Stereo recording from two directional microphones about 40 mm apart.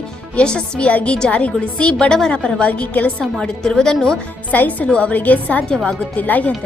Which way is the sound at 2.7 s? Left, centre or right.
Left.